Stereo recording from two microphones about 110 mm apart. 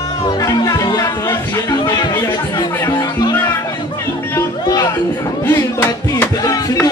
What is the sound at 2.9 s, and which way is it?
Speech, 40° left (ahead or behind).